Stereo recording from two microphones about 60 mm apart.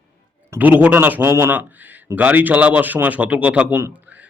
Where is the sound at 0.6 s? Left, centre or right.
Right.